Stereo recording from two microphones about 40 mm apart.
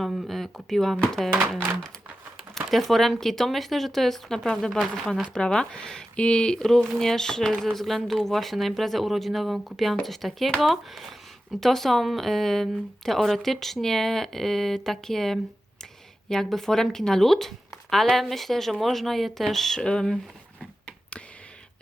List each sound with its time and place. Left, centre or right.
0.0 s speech: centre
2.6 s speech: centre
5.3 s speech: left
6.6 s speech: centre
19.8 s speech: centre